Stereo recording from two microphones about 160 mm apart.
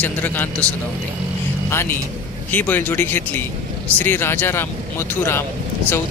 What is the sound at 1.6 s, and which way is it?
Speech, 15° left (ahead or behind).